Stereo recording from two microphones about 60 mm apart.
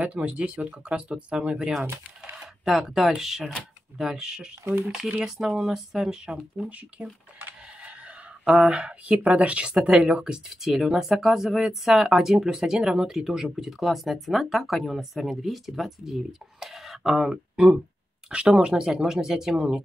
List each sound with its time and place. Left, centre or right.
0.0 s speech: right
2.3 s a sound: centre
2.8 s speech: centre
8.5 s speech: centre
18.3 s speech: centre